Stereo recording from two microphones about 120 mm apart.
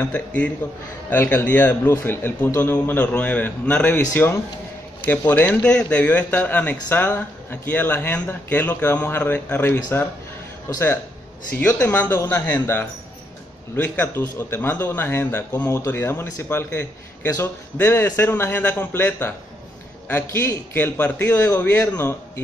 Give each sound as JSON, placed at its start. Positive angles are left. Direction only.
{"t": 0.0, "sound": "a man's voice", "side_deg": 15}